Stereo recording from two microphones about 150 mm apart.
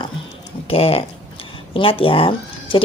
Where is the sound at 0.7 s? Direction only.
40° left (ahead or behind).